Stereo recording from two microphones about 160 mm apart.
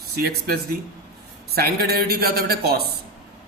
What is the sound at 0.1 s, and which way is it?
A man's voice, 80° right.